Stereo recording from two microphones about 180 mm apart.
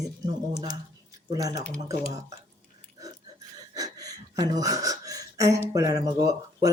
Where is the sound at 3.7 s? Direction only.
20° right (ahead or behind).